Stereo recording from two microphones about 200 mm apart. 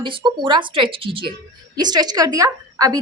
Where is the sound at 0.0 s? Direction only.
25° right (ahead or behind).